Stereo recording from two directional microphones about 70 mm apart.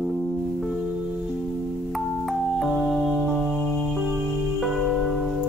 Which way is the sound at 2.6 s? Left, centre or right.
Centre.